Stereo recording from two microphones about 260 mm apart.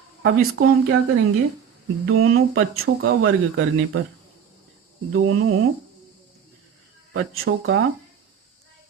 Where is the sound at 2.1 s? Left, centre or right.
Right.